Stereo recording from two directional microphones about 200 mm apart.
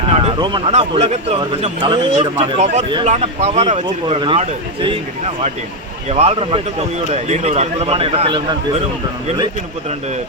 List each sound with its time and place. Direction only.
0.1 s speech: 30° right (ahead or behind)
6.1 s speech: 30° right (ahead or behind)